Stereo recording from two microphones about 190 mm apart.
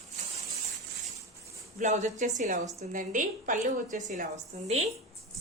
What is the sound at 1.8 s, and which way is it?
A woman's voice, 40° right (ahead or behind).